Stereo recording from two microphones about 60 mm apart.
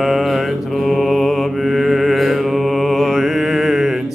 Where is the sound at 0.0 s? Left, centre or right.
Centre.